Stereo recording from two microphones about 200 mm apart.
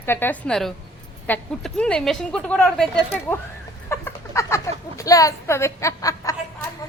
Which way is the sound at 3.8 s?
15° left (ahead or behind).